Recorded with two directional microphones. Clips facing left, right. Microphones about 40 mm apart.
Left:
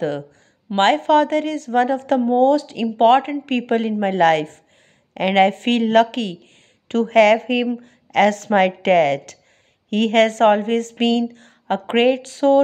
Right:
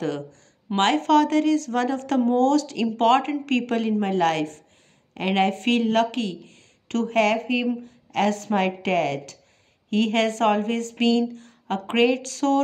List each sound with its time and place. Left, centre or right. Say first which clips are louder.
0.7 s a woman's voice: left 4 dB; left
4.0 s speech: left 6 dB; left
7.1 s a woman's voice: left 8 dB; left
7.8 s a woman's voice: left 7 dB; left